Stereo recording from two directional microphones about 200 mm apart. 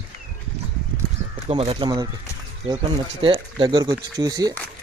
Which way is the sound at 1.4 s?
30° right (ahead or behind).